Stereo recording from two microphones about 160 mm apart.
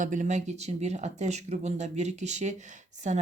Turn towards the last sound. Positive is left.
turn(degrees=-50)  # may be behind; listen again after turning